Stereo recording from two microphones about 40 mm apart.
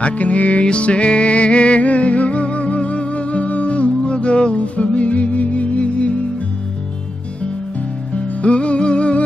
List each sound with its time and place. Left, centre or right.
0.0 s music: left
8.1 s music: left